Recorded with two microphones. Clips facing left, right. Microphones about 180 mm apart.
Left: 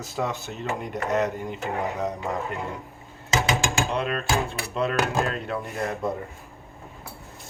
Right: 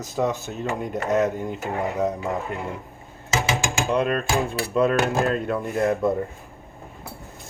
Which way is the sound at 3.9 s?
45° right (ahead or behind).